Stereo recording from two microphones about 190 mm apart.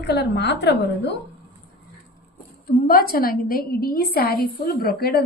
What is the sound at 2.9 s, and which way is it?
A woman's voice, 50° left (ahead or behind).